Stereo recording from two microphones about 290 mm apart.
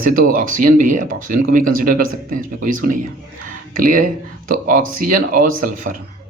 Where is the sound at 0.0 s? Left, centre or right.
Right.